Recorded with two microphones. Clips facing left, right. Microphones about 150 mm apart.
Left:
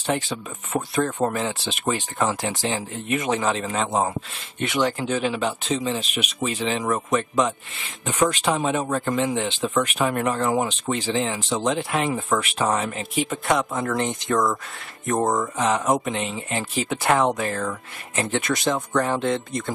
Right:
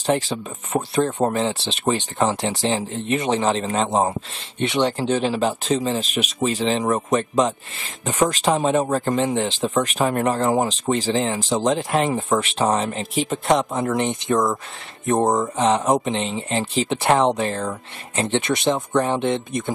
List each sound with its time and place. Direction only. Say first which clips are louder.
0.0 s speech: right 4 dB; 35° right (ahead or behind)
13.7 s speech: right 3 dB; 20° right (ahead or behind)